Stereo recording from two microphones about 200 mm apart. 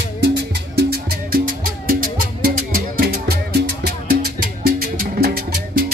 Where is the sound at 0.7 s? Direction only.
50° right (ahead or behind).